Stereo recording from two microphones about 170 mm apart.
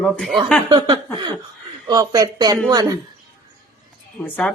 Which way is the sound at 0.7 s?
25° right (ahead or behind).